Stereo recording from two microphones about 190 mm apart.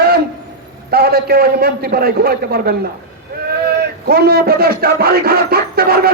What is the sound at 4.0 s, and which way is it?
Speech, 55° right (ahead or behind).